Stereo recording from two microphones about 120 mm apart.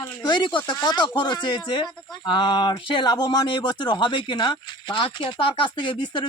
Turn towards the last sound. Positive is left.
turn(degrees=40)  # may be behind; listen again after turning